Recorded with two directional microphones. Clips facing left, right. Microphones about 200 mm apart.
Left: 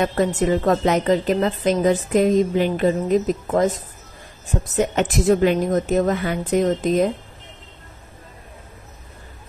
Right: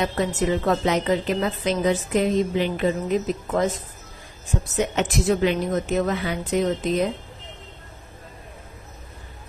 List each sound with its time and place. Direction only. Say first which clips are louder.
0.0 s a woman's voice: left 4 dB; 45° left (ahead or behind)